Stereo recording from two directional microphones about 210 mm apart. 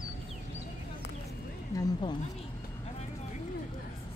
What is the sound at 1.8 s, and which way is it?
Speech, 20° left (ahead or behind).